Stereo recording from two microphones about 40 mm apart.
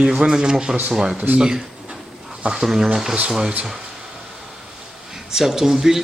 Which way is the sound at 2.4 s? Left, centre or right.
Right.